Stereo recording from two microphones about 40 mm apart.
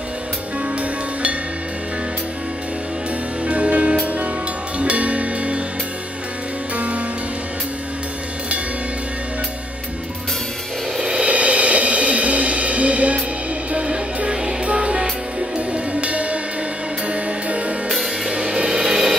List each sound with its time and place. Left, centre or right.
3.4 s music: right
11.0 s music: right
17.8 s music: centre
18.3 s music: right
18.7 s a sound: centre